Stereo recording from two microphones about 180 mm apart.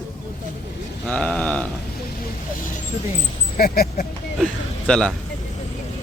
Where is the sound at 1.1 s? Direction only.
5° left (ahead or behind).